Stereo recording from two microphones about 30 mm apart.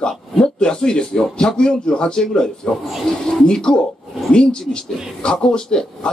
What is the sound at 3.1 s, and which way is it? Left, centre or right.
Speech, left.